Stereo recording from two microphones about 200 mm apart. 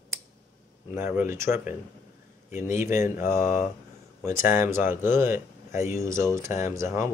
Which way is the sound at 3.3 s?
40° left (ahead or behind).